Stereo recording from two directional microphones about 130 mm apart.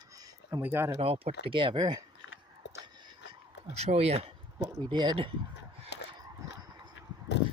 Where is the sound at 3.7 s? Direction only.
55° right (ahead or behind).